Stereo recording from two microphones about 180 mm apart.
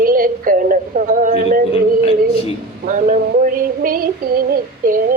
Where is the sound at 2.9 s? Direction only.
45° right (ahead or behind).